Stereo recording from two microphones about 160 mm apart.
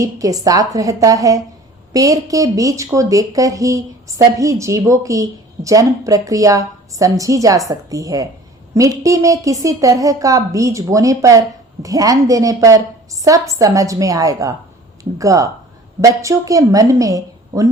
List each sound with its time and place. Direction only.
0.0 s speech: 20° right (ahead or behind)